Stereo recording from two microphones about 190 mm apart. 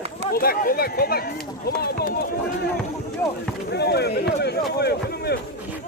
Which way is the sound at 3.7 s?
60° left (ahead or behind).